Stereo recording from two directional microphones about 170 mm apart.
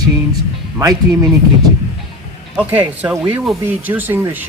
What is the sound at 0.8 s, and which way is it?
Speech, 20° right (ahead or behind).